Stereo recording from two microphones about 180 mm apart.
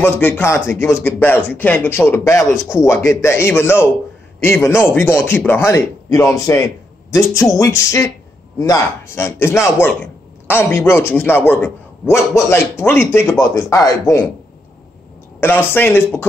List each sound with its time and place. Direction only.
0.0 s speech: 10° left (ahead or behind)
15.4 s speech: 10° left (ahead or behind)